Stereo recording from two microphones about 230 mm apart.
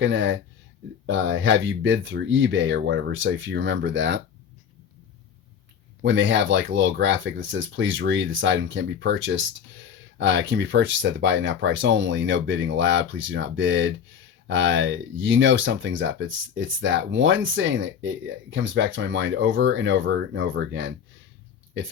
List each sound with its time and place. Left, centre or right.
0.0 s speech: right
6.0 s speech: right